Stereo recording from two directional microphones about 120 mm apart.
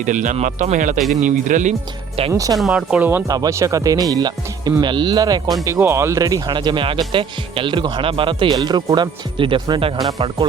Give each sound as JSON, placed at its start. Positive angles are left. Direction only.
{"t": 0.0, "sound": "speech", "side_deg": -90}
{"t": 2.3, "sound": "speech", "side_deg": -30}
{"t": 2.6, "sound": "speech", "side_deg": -5}
{"t": 3.2, "sound": "speech", "side_deg": -30}
{"t": 6.5, "sound": "speech", "side_deg": -40}